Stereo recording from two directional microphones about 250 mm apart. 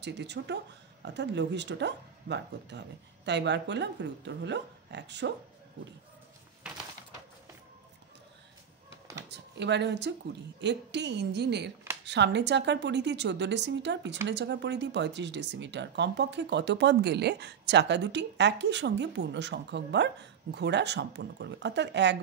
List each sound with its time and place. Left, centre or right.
0.0 s speech: right
9.3 s speech: right